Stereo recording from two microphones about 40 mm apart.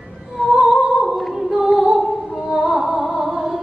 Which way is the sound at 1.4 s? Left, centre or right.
Centre.